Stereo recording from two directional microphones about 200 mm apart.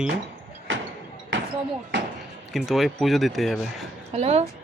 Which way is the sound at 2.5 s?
Centre (ahead or behind).